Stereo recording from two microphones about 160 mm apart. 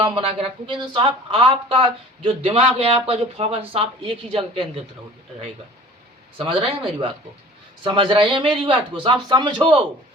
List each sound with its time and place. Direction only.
0.0 s speech: 35° right (ahead or behind)
6.3 s speech: 35° right (ahead or behind)